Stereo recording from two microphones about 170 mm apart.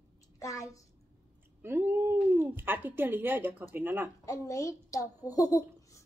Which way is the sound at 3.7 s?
10° right (ahead or behind).